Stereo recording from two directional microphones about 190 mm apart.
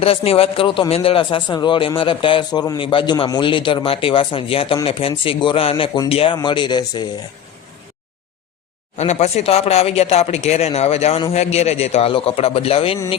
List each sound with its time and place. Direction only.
0.0 s a man's voice: 30° left (ahead or behind)
9.0 s speech: 35° left (ahead or behind)